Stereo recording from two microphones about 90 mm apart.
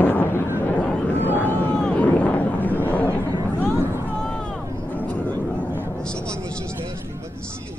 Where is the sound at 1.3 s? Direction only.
25° right (ahead or behind).